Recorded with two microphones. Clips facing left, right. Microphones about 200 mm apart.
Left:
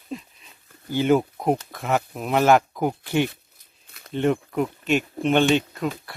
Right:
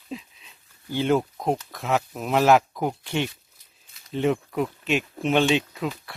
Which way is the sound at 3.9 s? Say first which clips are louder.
Left 10 dB; 60° left (ahead or behind).